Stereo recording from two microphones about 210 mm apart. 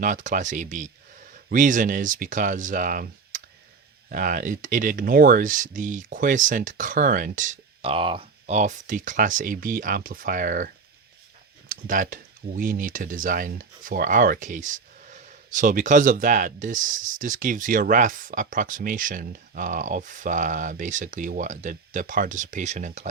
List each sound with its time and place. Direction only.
0.0 s speech: 35° right (ahead or behind)
11.7 s speech: 40° right (ahead or behind)